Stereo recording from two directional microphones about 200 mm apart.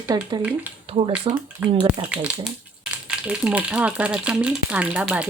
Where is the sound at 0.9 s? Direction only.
30° right (ahead or behind).